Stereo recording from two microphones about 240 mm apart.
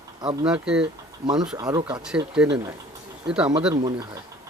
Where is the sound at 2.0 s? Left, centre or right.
Centre.